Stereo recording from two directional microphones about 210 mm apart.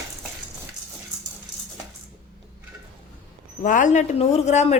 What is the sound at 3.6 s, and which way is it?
Speech, 40° left (ahead or behind).